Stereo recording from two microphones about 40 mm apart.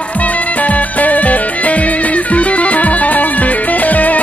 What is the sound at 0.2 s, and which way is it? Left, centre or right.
Music, left.